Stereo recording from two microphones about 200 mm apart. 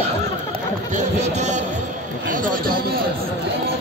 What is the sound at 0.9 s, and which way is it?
A man's voice, 35° right (ahead or behind).